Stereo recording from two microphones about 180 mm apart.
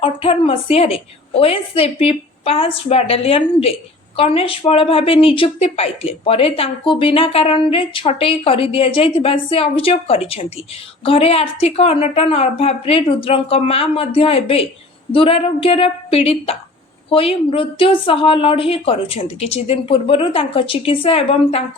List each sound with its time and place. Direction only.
0.0 s speech: 30° left (ahead or behind)